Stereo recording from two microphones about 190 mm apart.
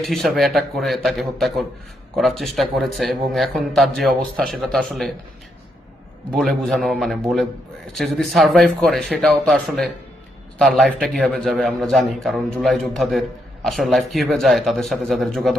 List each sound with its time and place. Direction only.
0.1 s speech: centre (ahead or behind)
6.3 s speech: centre (ahead or behind)